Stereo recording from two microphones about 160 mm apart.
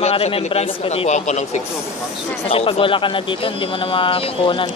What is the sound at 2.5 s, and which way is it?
Speech, 35° left (ahead or behind).